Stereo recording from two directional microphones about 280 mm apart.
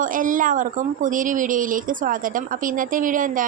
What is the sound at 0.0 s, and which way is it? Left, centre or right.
Speech, right.